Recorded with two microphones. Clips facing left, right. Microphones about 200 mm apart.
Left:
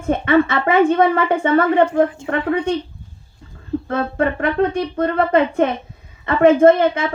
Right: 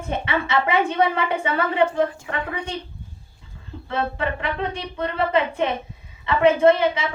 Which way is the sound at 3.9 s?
45° left (ahead or behind).